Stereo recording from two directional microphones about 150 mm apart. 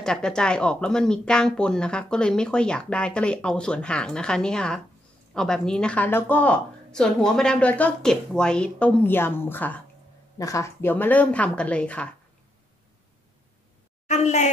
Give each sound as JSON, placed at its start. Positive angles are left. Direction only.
{"t": 0.0, "sound": "a woman's voice", "side_deg": 5}
{"t": 14.0, "sound": "a woman's voice", "side_deg": 50}